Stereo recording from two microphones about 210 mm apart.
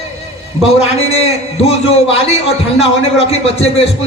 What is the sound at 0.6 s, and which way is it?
A man's voice, 30° left (ahead or behind).